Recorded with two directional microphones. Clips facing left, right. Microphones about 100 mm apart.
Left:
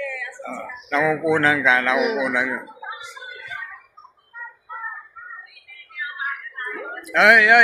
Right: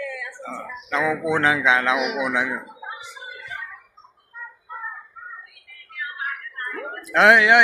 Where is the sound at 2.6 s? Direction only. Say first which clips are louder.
Left 1 dB; centre (ahead or behind).